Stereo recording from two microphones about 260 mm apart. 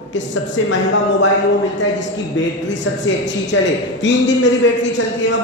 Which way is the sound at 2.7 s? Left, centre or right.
Left.